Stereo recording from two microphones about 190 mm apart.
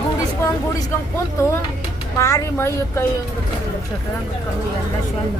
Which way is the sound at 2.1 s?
15° left (ahead or behind).